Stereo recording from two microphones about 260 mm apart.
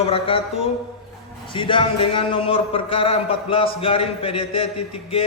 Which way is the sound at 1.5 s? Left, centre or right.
Centre.